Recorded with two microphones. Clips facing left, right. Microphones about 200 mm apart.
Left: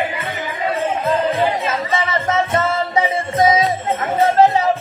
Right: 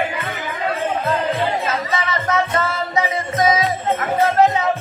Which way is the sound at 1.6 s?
25° left (ahead or behind).